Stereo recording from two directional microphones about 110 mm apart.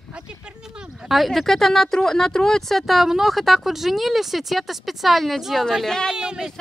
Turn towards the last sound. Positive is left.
turn(degrees=-5)  # may be behind; listen again after turning